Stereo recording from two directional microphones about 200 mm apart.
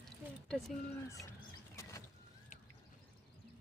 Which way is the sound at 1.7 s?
15° left (ahead or behind).